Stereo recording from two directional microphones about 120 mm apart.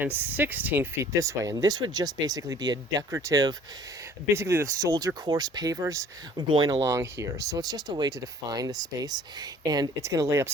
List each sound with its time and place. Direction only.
0.0 s speech: 15° right (ahead or behind); by 6.7 s 35° right (ahead or behind)
6.8 s speech: 25° right (ahead or behind)